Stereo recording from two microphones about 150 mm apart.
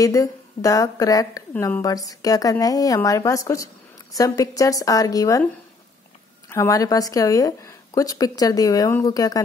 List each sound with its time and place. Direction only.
0.0 s a woman's voice: 20° left (ahead or behind)
6.5 s a woman's voice: 20° left (ahead or behind)